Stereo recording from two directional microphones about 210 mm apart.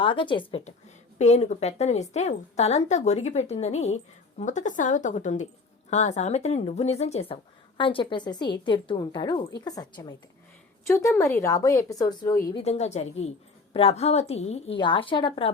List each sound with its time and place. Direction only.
0.0 s a woman's voice: 25° left (ahead or behind)
12.6 s a woman's voice: 30° left (ahead or behind)